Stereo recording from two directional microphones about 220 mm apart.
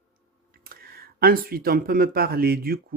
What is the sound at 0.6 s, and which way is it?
Speech, 45° right (ahead or behind).